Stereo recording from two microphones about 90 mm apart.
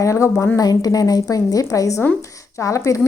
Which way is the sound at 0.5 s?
45° left (ahead or behind).